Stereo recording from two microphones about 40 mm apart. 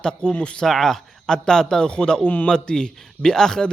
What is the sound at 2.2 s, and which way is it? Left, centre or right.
Speech, left.